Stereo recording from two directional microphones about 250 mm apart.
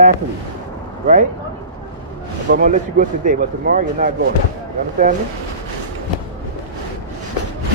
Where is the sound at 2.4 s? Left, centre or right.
Right.